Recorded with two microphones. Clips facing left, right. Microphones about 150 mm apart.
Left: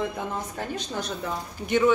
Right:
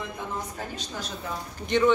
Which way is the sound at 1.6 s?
10° left (ahead or behind).